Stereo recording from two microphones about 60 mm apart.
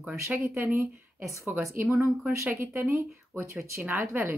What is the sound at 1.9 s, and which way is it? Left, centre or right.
Speech, right.